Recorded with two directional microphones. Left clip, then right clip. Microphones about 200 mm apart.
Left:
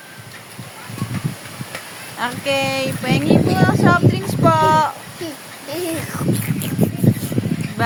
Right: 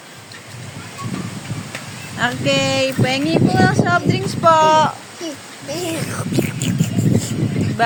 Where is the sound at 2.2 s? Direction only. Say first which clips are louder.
Right 2 dB; 15° right (ahead or behind).